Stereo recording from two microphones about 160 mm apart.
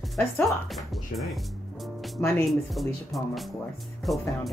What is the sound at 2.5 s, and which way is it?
Speech, centre (ahead or behind).